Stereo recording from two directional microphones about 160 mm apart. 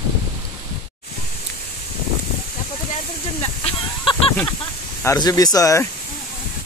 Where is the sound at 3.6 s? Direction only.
30° left (ahead or behind).